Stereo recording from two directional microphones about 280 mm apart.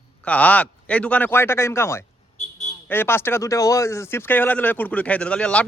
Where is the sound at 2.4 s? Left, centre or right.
Left.